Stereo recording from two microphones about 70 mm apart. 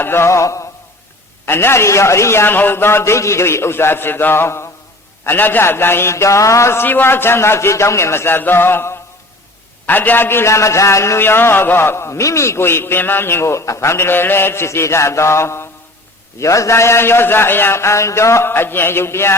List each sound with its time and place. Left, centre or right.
0.0 s music: left
1.5 s a man's voice: left
6.8 s a man's voice: left
11.2 s a man's voice: left